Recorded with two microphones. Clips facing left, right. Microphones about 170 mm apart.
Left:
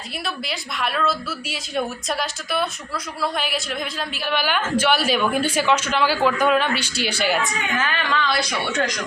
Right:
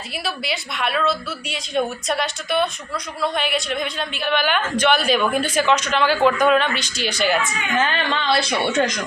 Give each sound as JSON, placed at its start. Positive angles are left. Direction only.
{"t": 0.3, "sound": "a woman's voice", "side_deg": 0}
{"t": 7.8, "sound": "a woman's voice", "side_deg": -30}